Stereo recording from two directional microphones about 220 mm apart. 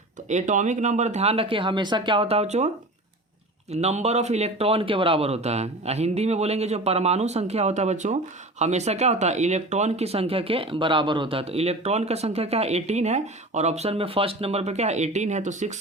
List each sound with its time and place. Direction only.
0.3 s speech: 35° right (ahead or behind)
3.7 s speech: 30° right (ahead or behind)